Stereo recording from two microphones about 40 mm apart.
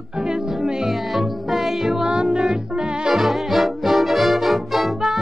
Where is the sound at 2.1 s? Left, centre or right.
Right.